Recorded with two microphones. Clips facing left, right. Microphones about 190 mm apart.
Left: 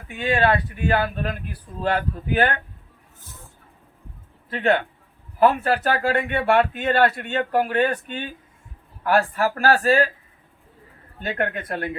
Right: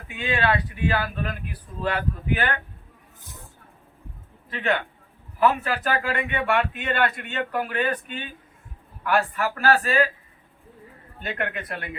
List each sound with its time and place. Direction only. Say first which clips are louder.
0.3 s speech: left 4 dB; 45° left (ahead or behind)
0.9 s speech: left 4 dB; 30° left (ahead or behind)
4.5 s speech: left 5 dB; 35° left (ahead or behind)
9.0 s speech: left 3 dB; 40° left (ahead or behind)
11.3 s speech: left 4 dB; 35° left (ahead or behind)